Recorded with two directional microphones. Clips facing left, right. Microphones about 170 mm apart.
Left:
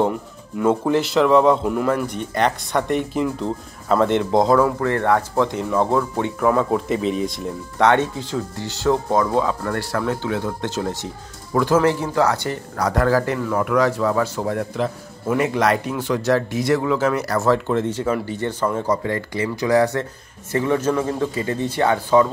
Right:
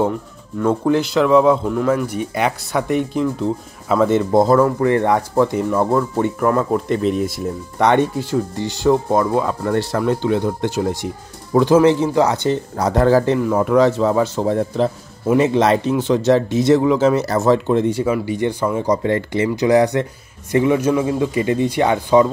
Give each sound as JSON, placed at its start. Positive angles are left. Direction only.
{"t": 0.6, "sound": "speech", "side_deg": 0}
{"t": 4.8, "sound": "speech", "side_deg": -15}